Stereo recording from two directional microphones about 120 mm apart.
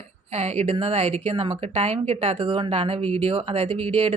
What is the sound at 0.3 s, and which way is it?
Speech, 60° right (ahead or behind).